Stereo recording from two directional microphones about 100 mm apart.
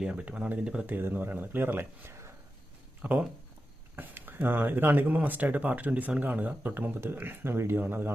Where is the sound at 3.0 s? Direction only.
15° right (ahead or behind).